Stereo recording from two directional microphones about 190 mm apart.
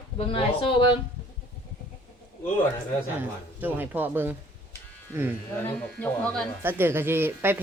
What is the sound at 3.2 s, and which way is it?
Speech, 10° right (ahead or behind).